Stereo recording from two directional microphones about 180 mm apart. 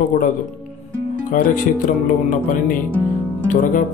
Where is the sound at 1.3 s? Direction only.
50° left (ahead or behind).